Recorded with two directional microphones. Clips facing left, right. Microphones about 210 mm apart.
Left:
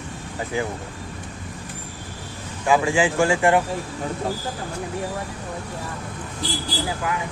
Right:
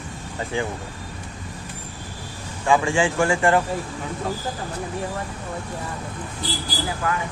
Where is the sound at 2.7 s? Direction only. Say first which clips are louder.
Left 1 dB; 5° left (ahead or behind).